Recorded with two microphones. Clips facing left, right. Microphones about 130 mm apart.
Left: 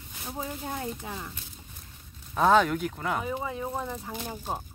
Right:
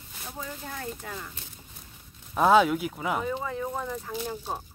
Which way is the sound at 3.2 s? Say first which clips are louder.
Right 1 dB; 15° left (ahead or behind).